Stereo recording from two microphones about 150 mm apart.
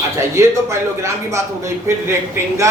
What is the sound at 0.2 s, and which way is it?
A man's voice, 20° right (ahead or behind).